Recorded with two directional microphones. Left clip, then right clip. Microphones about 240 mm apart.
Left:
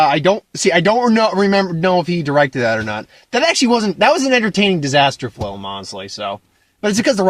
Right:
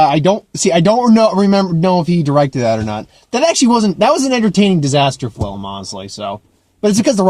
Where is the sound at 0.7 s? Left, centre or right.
Centre.